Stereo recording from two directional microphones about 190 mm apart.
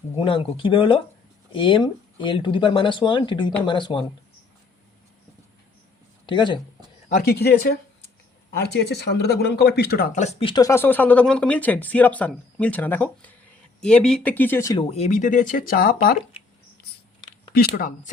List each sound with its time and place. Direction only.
0.2 s speech: 25° left (ahead or behind)
6.2 s speech: 25° left (ahead or behind)
7.1 s speech: 50° left (ahead or behind)
10.1 s speech: 40° left (ahead or behind)
10.4 s speech: 20° left (ahead or behind)
14.8 s speech: 35° left (ahead or behind); by 16.1 s 50° left (ahead or behind)
17.7 s speech: 45° left (ahead or behind)